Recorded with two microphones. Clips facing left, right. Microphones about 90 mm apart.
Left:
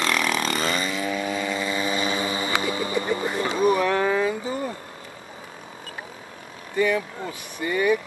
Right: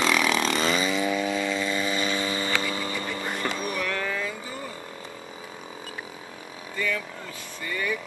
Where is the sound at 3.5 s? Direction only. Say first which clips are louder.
Left 9 dB; 25° left (ahead or behind).